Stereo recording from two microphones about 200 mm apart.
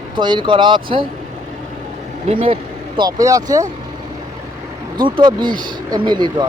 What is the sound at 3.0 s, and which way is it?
Speech, 15° right (ahead or behind).